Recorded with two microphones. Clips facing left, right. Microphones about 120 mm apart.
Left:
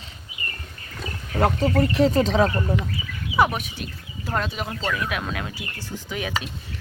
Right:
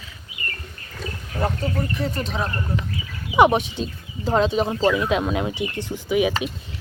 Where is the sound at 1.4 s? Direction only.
85° left.